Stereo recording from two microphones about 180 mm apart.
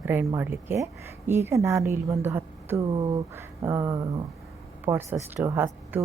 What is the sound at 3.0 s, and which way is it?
Speech, 25° right (ahead or behind).